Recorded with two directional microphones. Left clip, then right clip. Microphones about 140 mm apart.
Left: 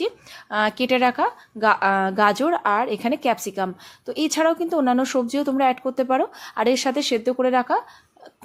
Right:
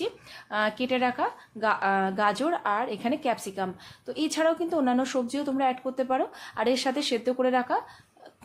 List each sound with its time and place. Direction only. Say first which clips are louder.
0.5 s speech: left 6 dB; 35° left (ahead or behind)